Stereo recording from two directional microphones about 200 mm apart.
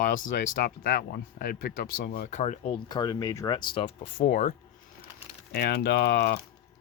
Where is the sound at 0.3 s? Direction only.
45° left (ahead or behind).